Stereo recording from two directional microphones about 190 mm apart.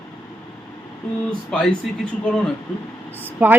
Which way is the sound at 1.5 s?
5° left (ahead or behind).